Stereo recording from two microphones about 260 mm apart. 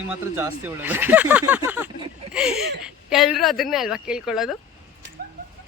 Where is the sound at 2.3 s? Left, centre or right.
Centre.